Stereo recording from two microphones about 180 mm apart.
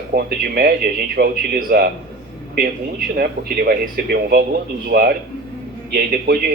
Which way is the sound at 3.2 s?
60° right (ahead or behind).